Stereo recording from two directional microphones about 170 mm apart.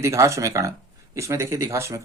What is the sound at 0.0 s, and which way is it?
Speech, 15° right (ahead or behind).